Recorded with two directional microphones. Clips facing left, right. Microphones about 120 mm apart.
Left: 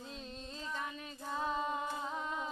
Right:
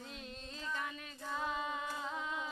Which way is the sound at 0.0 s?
30° left (ahead or behind).